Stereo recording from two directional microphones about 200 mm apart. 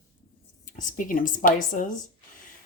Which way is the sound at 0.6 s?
40° left (ahead or behind).